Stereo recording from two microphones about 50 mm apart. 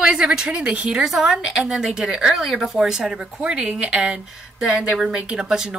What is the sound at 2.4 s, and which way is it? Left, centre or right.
Speech, centre.